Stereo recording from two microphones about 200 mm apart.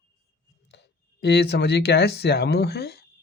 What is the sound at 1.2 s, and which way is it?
Speech, 55° left (ahead or behind).